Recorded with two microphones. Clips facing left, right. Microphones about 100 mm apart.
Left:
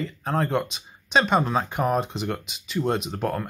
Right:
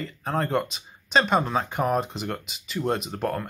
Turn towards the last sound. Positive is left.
turn(degrees=0)  # may be behind; listen again after turning